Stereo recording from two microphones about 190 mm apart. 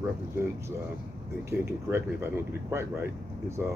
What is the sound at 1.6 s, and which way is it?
Speech, 15° right (ahead or behind).